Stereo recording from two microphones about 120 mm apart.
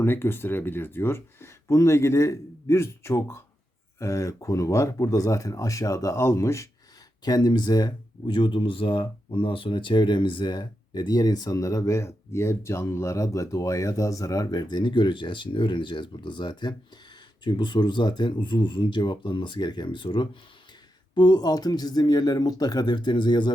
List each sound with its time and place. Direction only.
0.0 s speech: 20° left (ahead or behind); by 23.5 s 40° left (ahead or behind)